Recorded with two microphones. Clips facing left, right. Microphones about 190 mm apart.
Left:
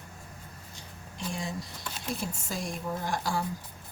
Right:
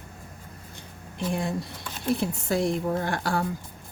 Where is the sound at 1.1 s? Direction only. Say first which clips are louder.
Right 7 dB; 60° right (ahead or behind).